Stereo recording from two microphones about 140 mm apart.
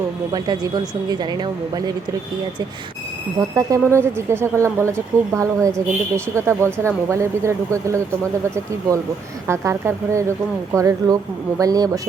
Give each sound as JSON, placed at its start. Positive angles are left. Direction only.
{"t": 0.3, "sound": "a woman's voice", "side_deg": -30}
{"t": 3.5, "sound": "speech", "side_deg": -25}
{"t": 9.5, "sound": "speech", "side_deg": -20}